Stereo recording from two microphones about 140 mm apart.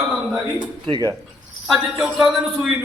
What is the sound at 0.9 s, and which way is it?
Speech, 25° right (ahead or behind).